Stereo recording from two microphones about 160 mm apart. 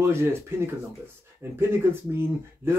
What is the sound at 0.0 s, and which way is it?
Speech, 15° right (ahead or behind).